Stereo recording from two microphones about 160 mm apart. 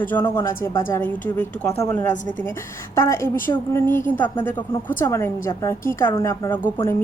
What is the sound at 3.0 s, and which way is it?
A woman's voice, 15° left (ahead or behind).